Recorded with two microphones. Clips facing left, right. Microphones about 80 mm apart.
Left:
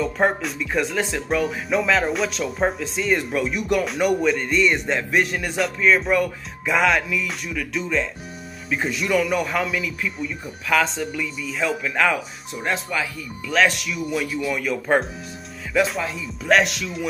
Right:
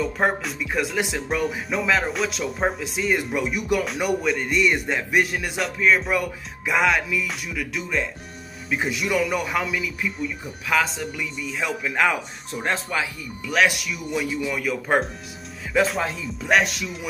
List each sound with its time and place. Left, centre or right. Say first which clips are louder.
0.0 s speech: left 2 dB; centre
1.3 s a man's voice: left 4 dB; centre
12.5 s speech: even; right
13.5 s a man's voice: left 1 dB; centre
13.7 s speech: left 2 dB; centre
16.4 s speech: left 2 dB; centre